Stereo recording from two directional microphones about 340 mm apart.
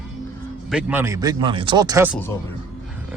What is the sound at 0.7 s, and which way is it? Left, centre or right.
Speech, centre.